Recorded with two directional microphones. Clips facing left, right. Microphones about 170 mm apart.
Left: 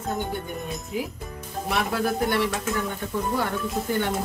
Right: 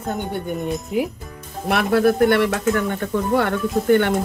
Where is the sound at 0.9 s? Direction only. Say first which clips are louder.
Right 7 dB; 65° right (ahead or behind).